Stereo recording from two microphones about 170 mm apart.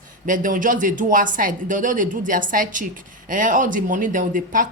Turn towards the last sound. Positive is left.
turn(degrees=-50)  # may be behind; listen again after turning